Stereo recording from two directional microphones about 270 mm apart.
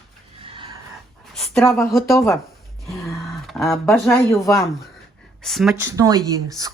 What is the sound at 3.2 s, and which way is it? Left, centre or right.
Speech, centre.